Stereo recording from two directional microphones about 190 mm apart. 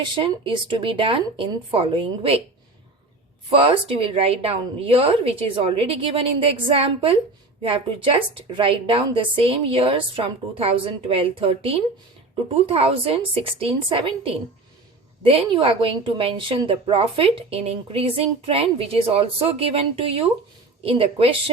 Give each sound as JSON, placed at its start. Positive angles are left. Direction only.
{"t": 0.0, "sound": "a woman's voice", "side_deg": -25}
{"t": 3.5, "sound": "a woman's voice", "side_deg": -30}